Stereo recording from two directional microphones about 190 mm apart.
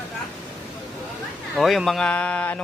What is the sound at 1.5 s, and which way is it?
Speech, centre (ahead or behind).